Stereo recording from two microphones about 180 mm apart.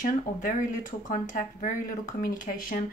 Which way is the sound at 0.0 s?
45° left (ahead or behind).